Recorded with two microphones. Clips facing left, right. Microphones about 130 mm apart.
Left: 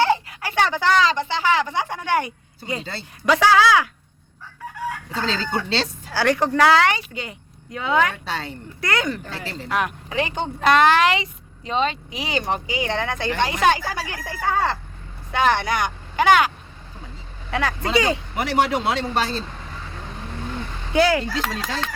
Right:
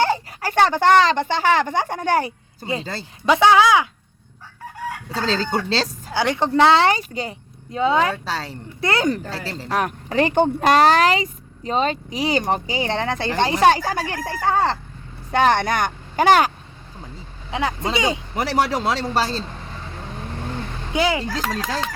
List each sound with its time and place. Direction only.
0.0 s speech: 40° right (ahead or behind); by 3.8 s 20° right (ahead or behind)
5.1 s speech: 35° right (ahead or behind)
6.1 s speech: 20° right (ahead or behind); by 14.4 s 45° right (ahead or behind)
14.5 s speech: 30° right (ahead or behind)
15.3 s speech: 45° right (ahead or behind)
17.5 s speech: 20° right (ahead or behind)
18.3 s speech: 35° right (ahead or behind)
20.9 s speech: 15° right (ahead or behind)